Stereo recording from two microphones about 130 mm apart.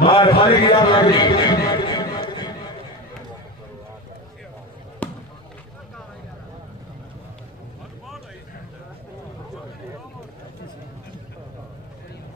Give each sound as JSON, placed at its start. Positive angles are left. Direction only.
{"t": 0.0, "sound": "a man's voice", "side_deg": 40}
{"t": 1.4, "sound": "a sound", "side_deg": 35}
{"t": 5.0, "sound": "basketball bounce", "side_deg": 15}